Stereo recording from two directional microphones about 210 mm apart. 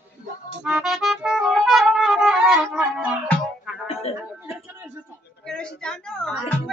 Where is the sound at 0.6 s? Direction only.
Centre (ahead or behind).